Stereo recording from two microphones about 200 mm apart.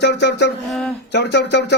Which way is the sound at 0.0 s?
60° left (ahead or behind).